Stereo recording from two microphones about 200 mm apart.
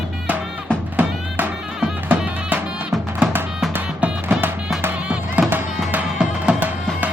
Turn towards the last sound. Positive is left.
turn(degrees=-10)  # may be behind; listen again after turning